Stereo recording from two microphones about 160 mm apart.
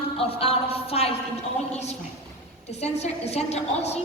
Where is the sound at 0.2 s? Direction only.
35° left (ahead or behind).